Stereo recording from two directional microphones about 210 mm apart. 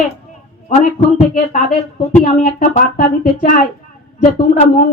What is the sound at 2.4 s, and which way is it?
A woman's voice, 40° left (ahead or behind).